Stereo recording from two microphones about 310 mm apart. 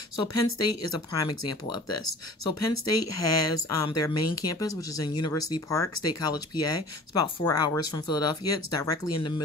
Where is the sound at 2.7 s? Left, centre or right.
Left.